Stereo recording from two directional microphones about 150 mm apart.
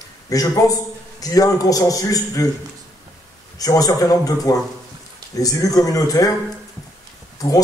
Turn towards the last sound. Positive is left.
turn(degrees=25)  # may be behind; listen again after turning